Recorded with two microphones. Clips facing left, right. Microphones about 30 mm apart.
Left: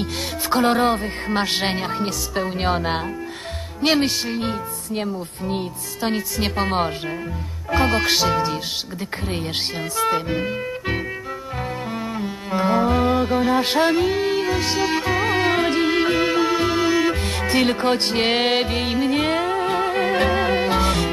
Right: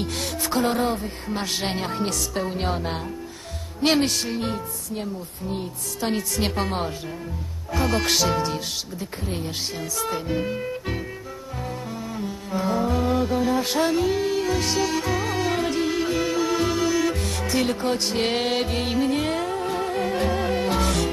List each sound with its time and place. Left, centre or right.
0.6 s speech: left
1.4 s speech: left
1.8 s speech: centre
2.6 s speech: left
4.0 s speech: centre
4.9 s speech: left
5.9 s speech: centre
7.9 s speech: centre
9.3 s speech: left
10.3 s music: left
14.6 s speech: left
14.9 s music: left
20.6 s music: left